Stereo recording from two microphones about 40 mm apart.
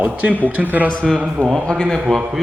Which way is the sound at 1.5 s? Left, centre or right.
Centre.